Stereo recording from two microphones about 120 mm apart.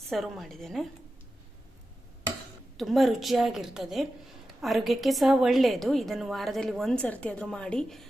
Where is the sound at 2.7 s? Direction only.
Centre (ahead or behind).